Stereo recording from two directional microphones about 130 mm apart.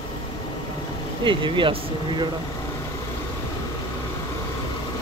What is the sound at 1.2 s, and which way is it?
Speech, 40° right (ahead or behind).